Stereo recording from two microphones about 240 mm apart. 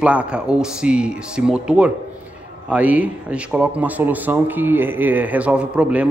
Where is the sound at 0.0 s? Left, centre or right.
Centre.